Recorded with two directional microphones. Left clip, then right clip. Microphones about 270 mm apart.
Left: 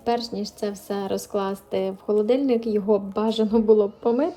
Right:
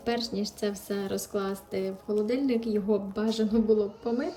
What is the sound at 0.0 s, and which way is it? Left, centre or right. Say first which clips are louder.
Speech: left 5 dB; centre.